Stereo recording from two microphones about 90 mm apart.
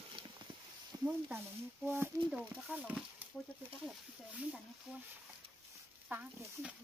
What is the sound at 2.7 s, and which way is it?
Speech, 15° right (ahead or behind).